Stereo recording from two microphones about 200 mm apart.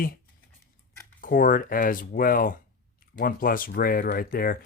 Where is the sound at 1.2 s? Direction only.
45° left (ahead or behind).